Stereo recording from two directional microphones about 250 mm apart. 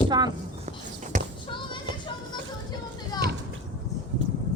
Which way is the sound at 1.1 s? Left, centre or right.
Right.